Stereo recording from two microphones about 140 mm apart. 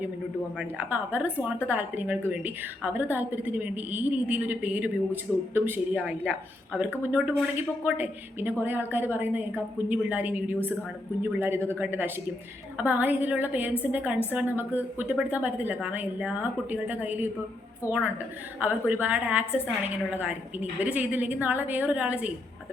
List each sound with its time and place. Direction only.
0.6 s a woman's voice: 10° right (ahead or behind)
18.6 s a woman's voice: 10° right (ahead or behind)